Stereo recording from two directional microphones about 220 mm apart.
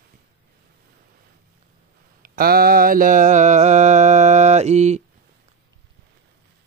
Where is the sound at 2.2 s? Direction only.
40° right (ahead or behind).